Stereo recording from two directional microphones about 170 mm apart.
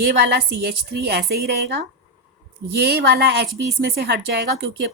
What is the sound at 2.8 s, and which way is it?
A woman's voice, 75° right (ahead or behind).